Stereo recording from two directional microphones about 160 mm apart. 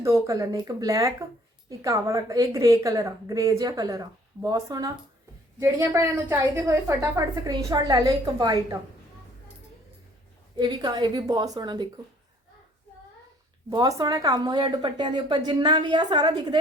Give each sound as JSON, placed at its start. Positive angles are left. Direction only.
{"t": 0.0, "sound": "a woman's voice", "side_deg": -20}
{"t": 10.6, "sound": "a woman's voice", "side_deg": -25}
{"t": 13.7, "sound": "a woman's voice", "side_deg": -20}